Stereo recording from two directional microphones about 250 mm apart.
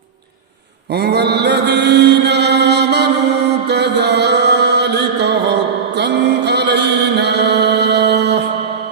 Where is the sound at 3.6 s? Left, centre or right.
Right.